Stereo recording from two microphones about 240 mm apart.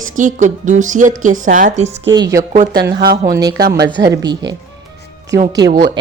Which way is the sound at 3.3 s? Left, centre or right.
Centre.